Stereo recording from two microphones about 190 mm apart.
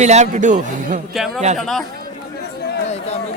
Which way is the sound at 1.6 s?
Centre (ahead or behind).